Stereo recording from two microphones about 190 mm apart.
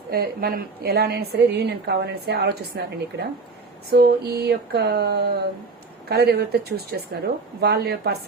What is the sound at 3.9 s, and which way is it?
A woman's voice, 55° right (ahead or behind).